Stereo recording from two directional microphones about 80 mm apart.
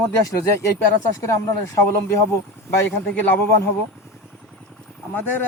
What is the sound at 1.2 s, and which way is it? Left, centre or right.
Speech, left.